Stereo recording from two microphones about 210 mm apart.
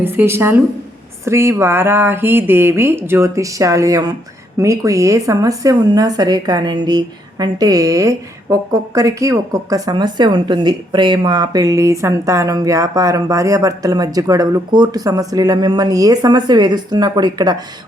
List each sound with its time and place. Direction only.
0.0 s speech: 10° right (ahead or behind)